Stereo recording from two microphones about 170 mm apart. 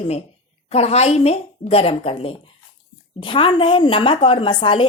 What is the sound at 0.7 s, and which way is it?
A woman's voice, 40° left (ahead or behind).